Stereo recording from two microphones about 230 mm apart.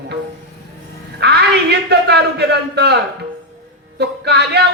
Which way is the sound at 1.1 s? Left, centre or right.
Right.